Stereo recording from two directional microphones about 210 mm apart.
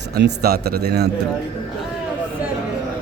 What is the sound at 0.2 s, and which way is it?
Speech, 50° right (ahead or behind).